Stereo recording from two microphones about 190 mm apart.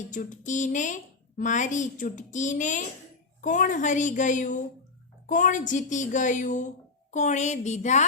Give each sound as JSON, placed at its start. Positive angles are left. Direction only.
{"t": 0.1, "sound": "a woman's voice", "side_deg": 40}